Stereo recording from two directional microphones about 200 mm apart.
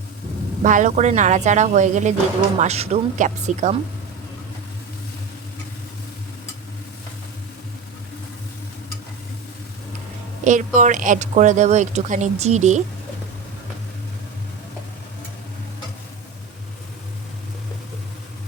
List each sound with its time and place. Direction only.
0.6 s speech: 40° right (ahead or behind)
10.4 s speech: 40° right (ahead or behind)